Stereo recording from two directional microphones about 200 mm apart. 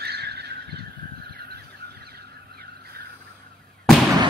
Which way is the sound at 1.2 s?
50° right (ahead or behind).